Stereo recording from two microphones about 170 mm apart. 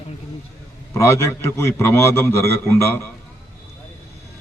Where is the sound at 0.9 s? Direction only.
15° left (ahead or behind).